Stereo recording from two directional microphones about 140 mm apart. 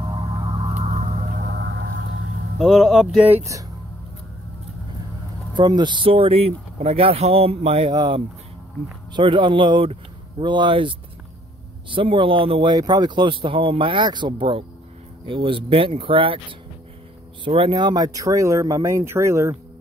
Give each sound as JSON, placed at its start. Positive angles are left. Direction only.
{"t": 0.0, "sound": "music", "side_deg": -30}
{"t": 2.6, "sound": "speech", "side_deg": 0}
{"t": 5.5, "sound": "speech", "side_deg": -30}
{"t": 7.9, "sound": "speech", "side_deg": -30}
{"t": 17.5, "sound": "speech", "side_deg": -35}